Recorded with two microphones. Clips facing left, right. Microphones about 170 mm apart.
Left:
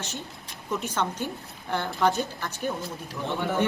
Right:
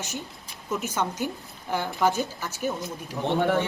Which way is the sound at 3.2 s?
45° right (ahead or behind).